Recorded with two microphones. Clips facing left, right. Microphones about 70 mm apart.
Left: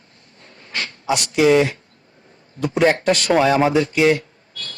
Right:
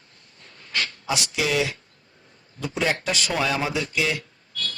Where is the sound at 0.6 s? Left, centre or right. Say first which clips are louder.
Left 1 dB; centre.